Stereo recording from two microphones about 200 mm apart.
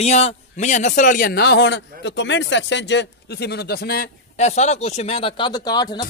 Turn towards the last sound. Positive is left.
turn(degrees=20)  # may be behind; listen again after turning